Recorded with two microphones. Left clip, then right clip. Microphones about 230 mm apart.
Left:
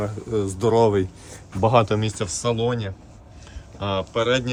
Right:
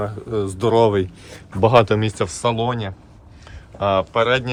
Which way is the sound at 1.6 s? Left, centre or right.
Right.